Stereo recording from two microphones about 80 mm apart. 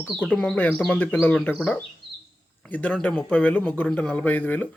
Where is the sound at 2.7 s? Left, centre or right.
Centre.